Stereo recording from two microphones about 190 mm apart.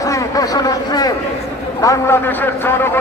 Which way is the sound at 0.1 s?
20° left (ahead or behind).